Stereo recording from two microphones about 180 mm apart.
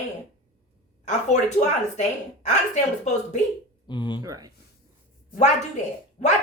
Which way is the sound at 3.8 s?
25° left (ahead or behind).